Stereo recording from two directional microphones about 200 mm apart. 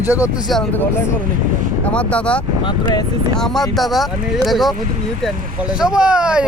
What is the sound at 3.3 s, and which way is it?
Speech, centre (ahead or behind).